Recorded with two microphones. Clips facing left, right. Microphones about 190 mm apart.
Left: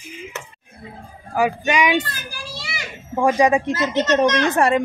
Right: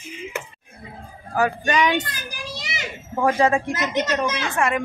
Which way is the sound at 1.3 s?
10° left (ahead or behind).